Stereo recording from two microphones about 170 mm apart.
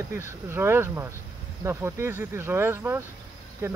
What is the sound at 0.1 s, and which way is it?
Speech, 15° right (ahead or behind).